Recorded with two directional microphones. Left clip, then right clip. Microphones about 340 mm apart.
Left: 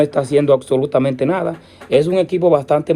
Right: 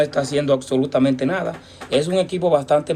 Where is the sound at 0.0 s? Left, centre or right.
Centre.